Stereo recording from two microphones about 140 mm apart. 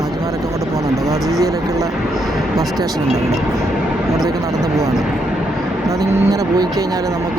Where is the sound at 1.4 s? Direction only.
25° right (ahead or behind).